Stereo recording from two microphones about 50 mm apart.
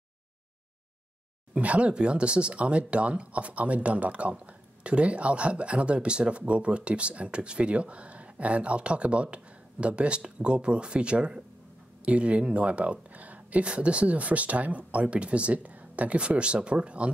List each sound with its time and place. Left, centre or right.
1.5 s speech: right